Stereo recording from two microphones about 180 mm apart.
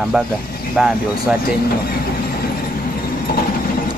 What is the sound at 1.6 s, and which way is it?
Speech, 55° left (ahead or behind).